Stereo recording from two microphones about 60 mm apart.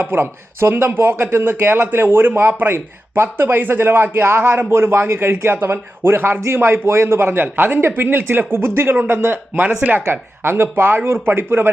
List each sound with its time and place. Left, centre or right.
0.0 s speech: right